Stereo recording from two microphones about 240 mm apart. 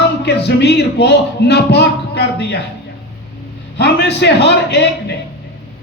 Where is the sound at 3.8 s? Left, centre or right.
Left.